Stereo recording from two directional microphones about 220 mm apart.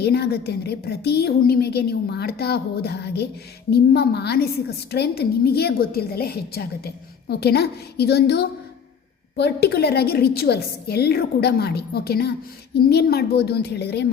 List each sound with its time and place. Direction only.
0.0 s a woman's voice: 45° left (ahead or behind)